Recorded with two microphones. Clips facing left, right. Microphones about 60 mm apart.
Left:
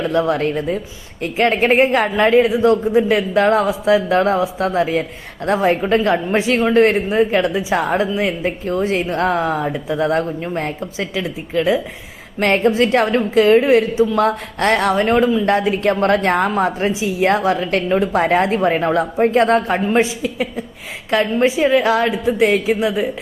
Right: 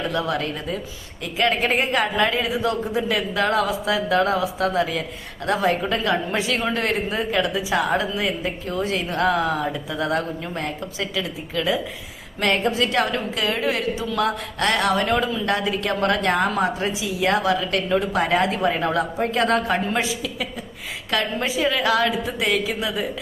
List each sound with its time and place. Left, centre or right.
0.1 s a woman's voice: left